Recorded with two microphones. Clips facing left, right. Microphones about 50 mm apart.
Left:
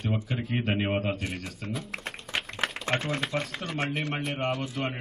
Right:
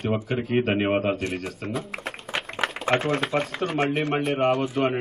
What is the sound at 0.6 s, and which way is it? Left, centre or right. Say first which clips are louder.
Speech: right 6 dB; centre.